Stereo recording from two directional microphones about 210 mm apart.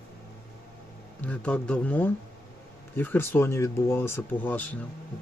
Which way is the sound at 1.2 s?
5° left (ahead or behind).